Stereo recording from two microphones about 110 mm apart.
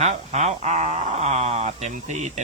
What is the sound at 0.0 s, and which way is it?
Speech, 90° right.